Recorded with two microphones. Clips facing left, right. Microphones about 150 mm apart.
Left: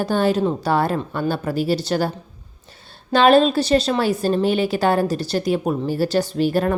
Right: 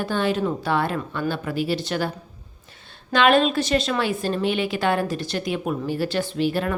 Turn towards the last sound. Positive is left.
turn(degrees=40)  # may be behind; listen again after turning